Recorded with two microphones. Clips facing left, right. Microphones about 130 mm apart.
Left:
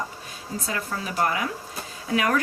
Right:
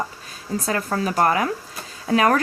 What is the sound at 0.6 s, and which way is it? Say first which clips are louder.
Speech: right 7 dB; 55° right (ahead or behind).